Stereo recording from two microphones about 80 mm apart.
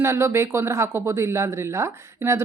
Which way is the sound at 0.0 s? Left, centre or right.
Right.